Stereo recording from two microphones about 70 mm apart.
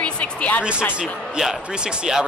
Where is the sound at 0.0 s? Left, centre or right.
Centre.